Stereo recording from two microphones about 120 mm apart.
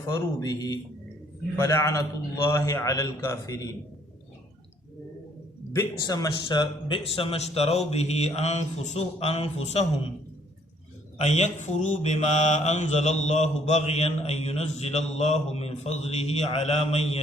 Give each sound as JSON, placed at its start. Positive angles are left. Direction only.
{"t": 0.1, "sound": "a man's voice", "side_deg": 30}
{"t": 5.7, "sound": "speech", "side_deg": 25}
{"t": 11.2, "sound": "mantra", "side_deg": 70}